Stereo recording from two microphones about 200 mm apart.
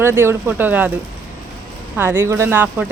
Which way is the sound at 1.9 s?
10° right (ahead or behind).